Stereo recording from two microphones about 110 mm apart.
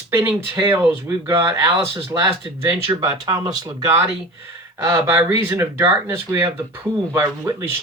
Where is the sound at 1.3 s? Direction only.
20° right (ahead or behind).